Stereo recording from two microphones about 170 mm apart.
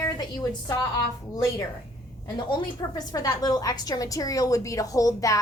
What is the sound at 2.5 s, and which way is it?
A woman's voice, 25° left (ahead or behind).